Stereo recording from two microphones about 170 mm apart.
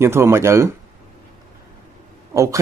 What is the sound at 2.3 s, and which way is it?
Speech, 20° right (ahead or behind).